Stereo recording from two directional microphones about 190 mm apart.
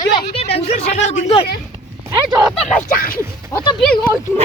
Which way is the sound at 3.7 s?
5° left (ahead or behind).